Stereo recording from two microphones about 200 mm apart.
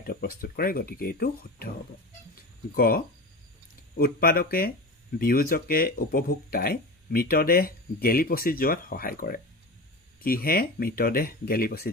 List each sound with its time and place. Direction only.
0.0 s speech: 50° left (ahead or behind)
2.7 s speech: 45° left (ahead or behind)